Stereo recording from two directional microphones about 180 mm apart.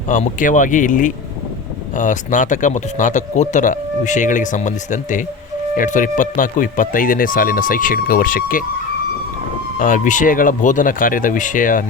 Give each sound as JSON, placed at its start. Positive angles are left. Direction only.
{"t": 0.1, "sound": "speech", "side_deg": 45}
{"t": 9.7, "sound": "speech", "side_deg": 45}